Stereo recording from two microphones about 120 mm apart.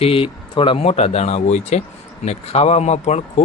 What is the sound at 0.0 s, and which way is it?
Speech, 50° left (ahead or behind).